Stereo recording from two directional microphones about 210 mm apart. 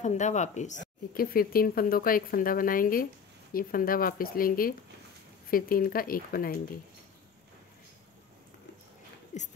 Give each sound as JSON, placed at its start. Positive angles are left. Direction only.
{"t": 0.0, "sound": "speech", "side_deg": 35}